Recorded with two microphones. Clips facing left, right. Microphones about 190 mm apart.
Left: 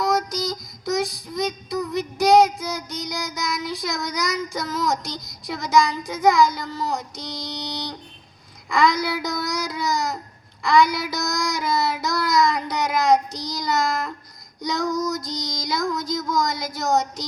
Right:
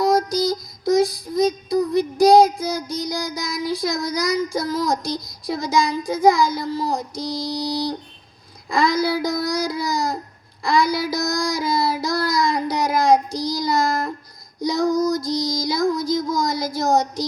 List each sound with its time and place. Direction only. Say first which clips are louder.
0.0 s child singing: right 5 dB; 30° right (ahead or behind)